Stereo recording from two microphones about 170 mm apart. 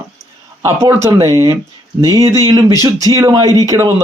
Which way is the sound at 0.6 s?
15° right (ahead or behind).